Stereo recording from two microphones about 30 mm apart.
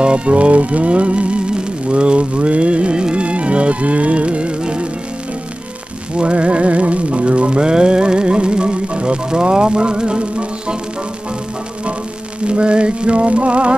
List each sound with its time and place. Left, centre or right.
0.0 s music: right
6.1 s music: right
12.4 s music: right